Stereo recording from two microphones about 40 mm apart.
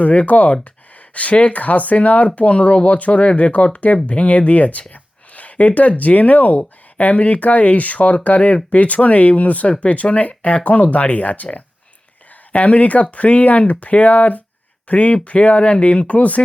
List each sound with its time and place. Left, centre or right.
0.0 s speech: left
5.3 s a sound: left
6.0 s speech: left